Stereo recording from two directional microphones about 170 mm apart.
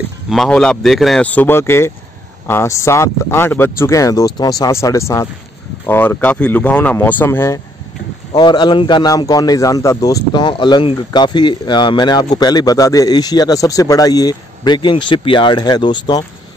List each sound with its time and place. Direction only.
0.3 s speech: 5° left (ahead or behind)
8.3 s speech: 25° left (ahead or behind)